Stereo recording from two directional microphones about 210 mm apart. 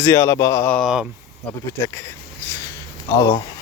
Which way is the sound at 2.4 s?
10° left (ahead or behind).